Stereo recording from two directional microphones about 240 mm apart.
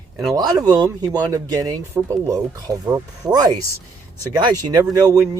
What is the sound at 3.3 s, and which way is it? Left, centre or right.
Speech, centre.